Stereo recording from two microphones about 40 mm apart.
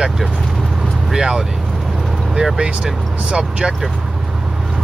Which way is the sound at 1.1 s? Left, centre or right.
Centre.